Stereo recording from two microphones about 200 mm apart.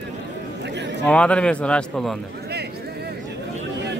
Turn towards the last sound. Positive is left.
turn(degrees=5)  # may be behind; listen again after turning